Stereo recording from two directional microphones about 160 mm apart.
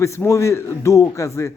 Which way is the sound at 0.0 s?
20° left (ahead or behind).